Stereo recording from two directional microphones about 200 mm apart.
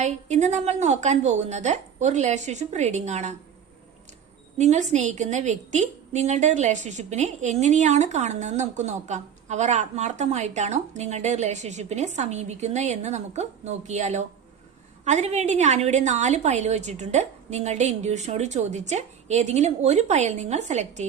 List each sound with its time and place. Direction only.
0.0 s a woman's voice: 35° right (ahead or behind)
4.5 s a woman's voice: 35° right (ahead or behind)